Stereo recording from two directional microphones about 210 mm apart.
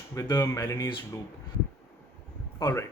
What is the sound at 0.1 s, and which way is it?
Speech, 15° left (ahead or behind).